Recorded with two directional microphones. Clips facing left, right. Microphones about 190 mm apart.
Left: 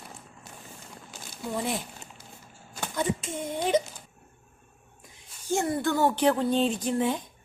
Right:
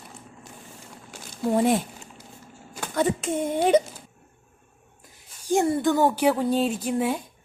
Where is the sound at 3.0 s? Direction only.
60° right (ahead or behind).